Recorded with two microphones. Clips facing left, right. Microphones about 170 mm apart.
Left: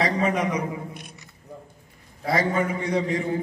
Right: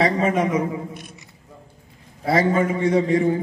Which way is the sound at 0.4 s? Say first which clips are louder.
Right 5 dB; 25° right (ahead or behind).